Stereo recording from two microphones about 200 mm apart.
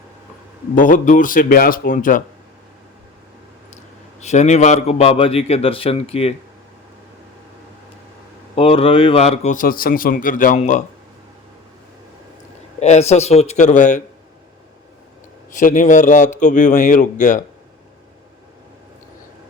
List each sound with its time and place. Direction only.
0.8 s a man's voice: 40° left (ahead or behind)
4.2 s a man's voice: 35° left (ahead or behind)
8.5 s a man's voice: 30° left (ahead or behind)
12.8 s a man's voice: 35° left (ahead or behind)
15.5 s a man's voice: 40° left (ahead or behind)